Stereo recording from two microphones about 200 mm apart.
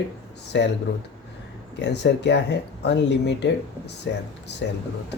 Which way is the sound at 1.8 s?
60° left (ahead or behind).